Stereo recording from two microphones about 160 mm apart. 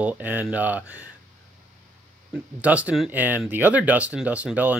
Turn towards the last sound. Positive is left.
turn(degrees=-10)  # may be behind; listen again after turning